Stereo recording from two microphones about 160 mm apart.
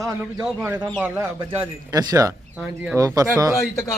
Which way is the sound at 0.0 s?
20° right (ahead or behind).